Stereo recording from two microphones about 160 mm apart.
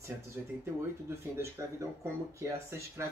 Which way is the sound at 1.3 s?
15° right (ahead or behind).